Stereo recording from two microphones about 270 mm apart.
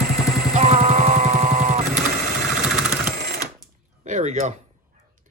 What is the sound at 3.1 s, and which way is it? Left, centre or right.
Sewing machine, right.